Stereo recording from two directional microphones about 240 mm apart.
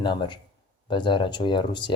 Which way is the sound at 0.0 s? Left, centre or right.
Centre.